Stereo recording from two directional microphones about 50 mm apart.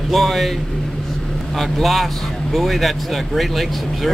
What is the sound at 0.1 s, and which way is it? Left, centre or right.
Speech, centre.